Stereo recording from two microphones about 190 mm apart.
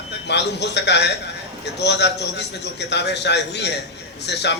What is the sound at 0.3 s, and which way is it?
A man's voice, 65° left (ahead or behind).